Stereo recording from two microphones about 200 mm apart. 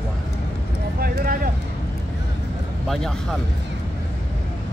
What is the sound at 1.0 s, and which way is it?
Speech, 45° right (ahead or behind).